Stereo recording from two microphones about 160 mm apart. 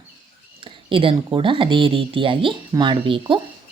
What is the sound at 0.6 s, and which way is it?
Speech, 30° right (ahead or behind).